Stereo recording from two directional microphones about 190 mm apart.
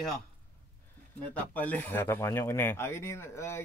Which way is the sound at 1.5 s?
10° left (ahead or behind).